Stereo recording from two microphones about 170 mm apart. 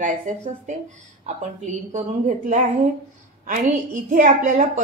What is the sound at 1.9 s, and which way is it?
A woman's voice, 45° right (ahead or behind).